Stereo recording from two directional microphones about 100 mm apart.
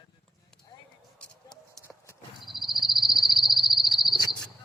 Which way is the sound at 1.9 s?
5° left (ahead or behind).